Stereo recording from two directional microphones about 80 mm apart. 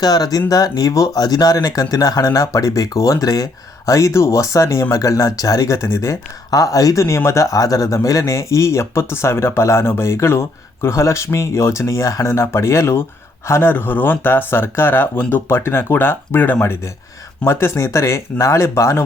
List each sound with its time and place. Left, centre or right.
0.0 s speech: left